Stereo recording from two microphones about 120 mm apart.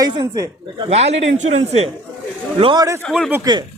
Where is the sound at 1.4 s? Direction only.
60° right (ahead or behind).